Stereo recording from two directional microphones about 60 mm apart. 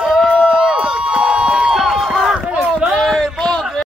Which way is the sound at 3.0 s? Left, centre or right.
Centre.